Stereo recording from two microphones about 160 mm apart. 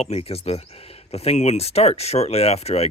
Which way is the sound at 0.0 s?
40° left (ahead or behind).